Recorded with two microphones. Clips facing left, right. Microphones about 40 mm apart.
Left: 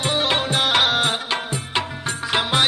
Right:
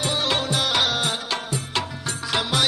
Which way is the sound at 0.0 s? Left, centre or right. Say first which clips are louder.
Left 3 dB; left.